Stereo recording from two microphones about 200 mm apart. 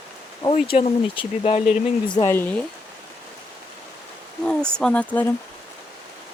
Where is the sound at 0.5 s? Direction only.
30° left (ahead or behind).